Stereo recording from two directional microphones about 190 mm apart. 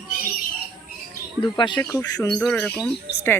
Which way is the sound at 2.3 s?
5° left (ahead or behind).